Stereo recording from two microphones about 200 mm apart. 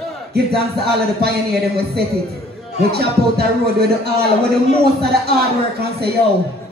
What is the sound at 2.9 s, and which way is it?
Speech, 55° right (ahead or behind).